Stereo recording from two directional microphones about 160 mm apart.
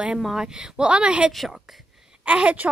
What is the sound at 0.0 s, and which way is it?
A woman's voice, 5° right (ahead or behind).